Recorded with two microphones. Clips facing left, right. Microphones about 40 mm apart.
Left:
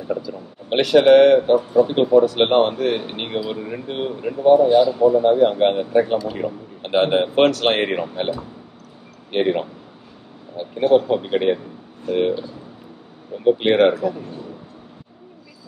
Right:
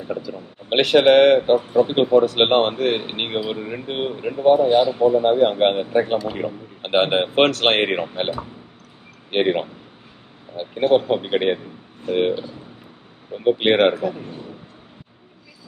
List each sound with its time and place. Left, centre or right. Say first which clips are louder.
0.7 s speech: left 1 dB; right